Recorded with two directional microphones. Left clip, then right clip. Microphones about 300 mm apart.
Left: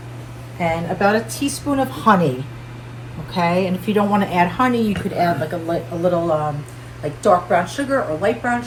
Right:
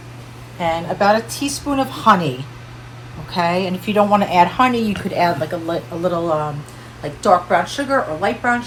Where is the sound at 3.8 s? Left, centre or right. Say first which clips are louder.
Right 3 dB; centre.